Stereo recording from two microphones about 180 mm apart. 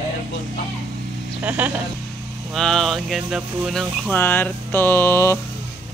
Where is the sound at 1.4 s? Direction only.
10° right (ahead or behind); by 5.4 s 15° left (ahead or behind).